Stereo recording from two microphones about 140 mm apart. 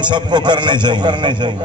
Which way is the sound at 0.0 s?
35° right (ahead or behind).